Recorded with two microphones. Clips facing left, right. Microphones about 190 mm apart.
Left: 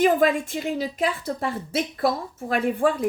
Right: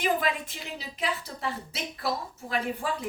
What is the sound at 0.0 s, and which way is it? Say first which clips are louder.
A woman's voice: left 9 dB; 45° left (ahead or behind).